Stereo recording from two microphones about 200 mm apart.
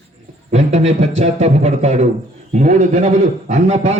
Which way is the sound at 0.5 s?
35° right (ahead or behind).